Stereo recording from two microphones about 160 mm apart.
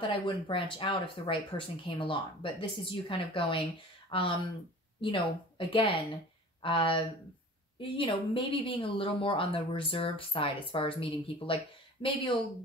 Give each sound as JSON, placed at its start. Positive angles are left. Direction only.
{"t": 0.0, "sound": "speech", "side_deg": 30}